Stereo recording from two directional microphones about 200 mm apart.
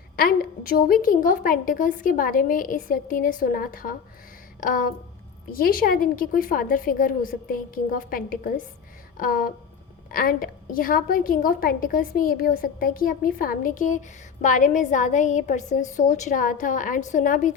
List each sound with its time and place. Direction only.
0.2 s a woman's voice: 45° left (ahead or behind)